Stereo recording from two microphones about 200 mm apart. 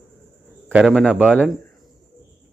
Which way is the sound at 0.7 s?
5° right (ahead or behind).